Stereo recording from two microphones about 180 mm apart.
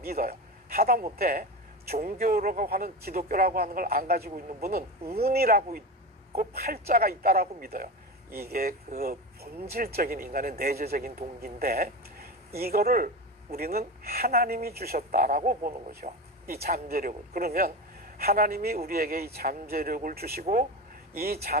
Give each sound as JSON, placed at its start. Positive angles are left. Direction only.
{"t": 0.0, "sound": "a man's voice", "side_deg": -60}
{"t": 20.4, "sound": "speech", "side_deg": -45}
{"t": 21.2, "sound": "speech", "side_deg": -60}